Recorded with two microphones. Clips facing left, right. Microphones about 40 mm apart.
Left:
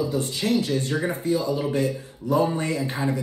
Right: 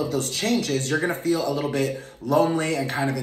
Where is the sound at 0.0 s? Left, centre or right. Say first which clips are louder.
Even; right.